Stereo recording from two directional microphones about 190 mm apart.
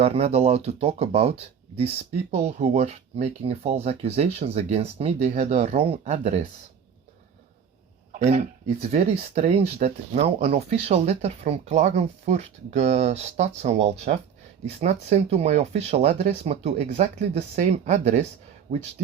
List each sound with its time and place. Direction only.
0.0 s speech: 35° right (ahead or behind)
8.1 s speech: 40° right (ahead or behind)